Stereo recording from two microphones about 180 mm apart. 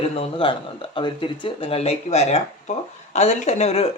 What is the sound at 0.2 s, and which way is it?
Speech, 30° left (ahead or behind).